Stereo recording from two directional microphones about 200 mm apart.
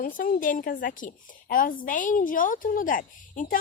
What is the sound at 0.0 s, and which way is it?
Speech, 45° left (ahead or behind).